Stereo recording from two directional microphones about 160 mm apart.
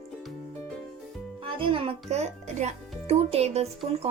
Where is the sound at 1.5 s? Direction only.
35° right (ahead or behind).